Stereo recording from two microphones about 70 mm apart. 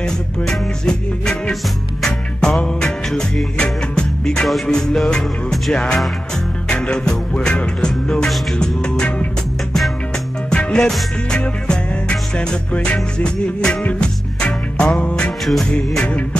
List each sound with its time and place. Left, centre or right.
0.0 s music: centre
10.5 s music: centre
15.4 s music: centre
16.0 s music: centre